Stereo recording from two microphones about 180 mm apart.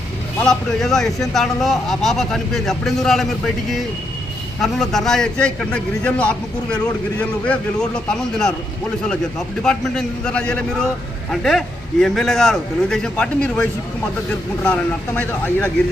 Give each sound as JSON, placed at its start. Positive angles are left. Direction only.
{"t": 0.4, "sound": "speech", "side_deg": 0}
{"t": 9.6, "sound": "speech", "side_deg": 5}